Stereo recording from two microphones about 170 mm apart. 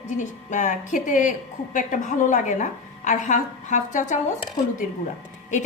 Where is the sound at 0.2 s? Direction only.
45° left (ahead or behind).